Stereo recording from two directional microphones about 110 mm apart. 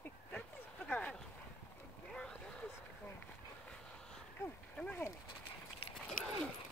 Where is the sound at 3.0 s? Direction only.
15° left (ahead or behind).